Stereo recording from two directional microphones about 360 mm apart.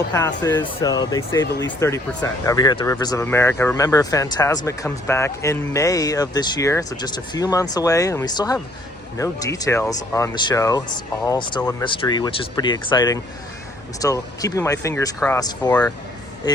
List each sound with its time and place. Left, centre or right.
0.1 s speech: centre